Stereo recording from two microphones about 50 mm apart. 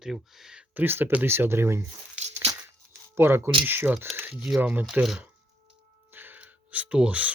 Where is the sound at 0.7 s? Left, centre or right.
Right.